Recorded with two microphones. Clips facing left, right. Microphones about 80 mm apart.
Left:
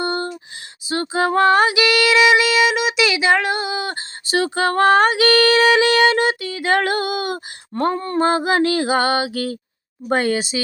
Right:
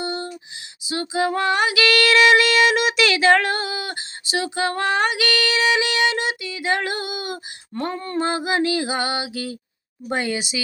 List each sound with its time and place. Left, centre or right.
0.0 s a sound: left
0.9 s female singing: left
1.7 s music: centre
4.3 s music: left
7.8 s music: left
10.1 s female singing: left